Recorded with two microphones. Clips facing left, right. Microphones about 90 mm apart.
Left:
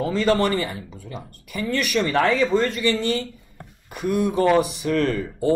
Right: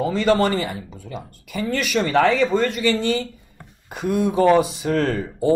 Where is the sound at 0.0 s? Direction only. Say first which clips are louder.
Right 2 dB; 15° right (ahead or behind).